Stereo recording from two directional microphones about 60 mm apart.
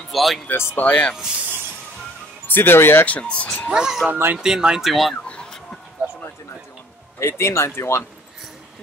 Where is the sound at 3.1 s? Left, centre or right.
Centre.